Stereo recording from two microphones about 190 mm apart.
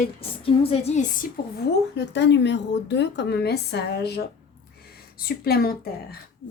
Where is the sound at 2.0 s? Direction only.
65° left (ahead or behind).